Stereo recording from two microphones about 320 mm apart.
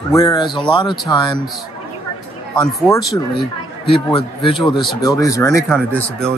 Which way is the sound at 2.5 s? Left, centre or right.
Centre.